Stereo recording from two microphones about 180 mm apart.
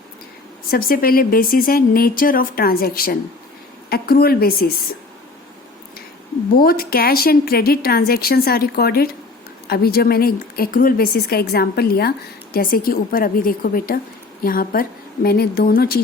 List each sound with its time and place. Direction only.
0.7 s speech: 55° left (ahead or behind)
6.6 s a woman's voice: 55° left (ahead or behind)